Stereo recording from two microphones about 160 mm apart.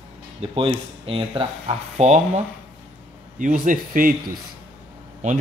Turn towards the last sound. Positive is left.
turn(degrees=-50)  # may be behind; listen again after turning